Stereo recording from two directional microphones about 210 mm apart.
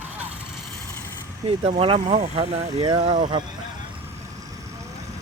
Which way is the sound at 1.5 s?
25° right (ahead or behind).